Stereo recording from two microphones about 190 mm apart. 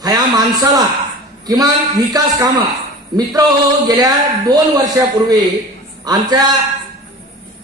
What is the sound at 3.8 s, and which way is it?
A man's voice, 20° right (ahead or behind).